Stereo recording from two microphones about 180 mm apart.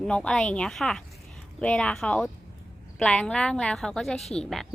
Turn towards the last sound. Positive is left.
turn(degrees=5)  # may be behind; listen again after turning